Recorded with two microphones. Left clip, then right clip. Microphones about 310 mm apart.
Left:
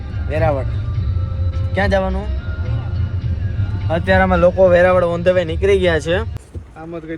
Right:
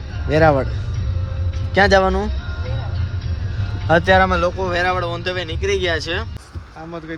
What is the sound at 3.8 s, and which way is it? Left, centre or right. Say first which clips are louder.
Speech: right 2 dB; right.